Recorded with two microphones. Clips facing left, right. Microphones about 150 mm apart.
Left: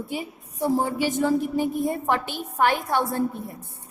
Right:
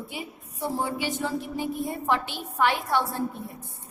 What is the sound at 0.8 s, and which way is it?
A woman's voice, 45° left (ahead or behind).